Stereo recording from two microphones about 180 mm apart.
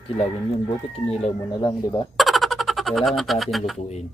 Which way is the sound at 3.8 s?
40° left (ahead or behind).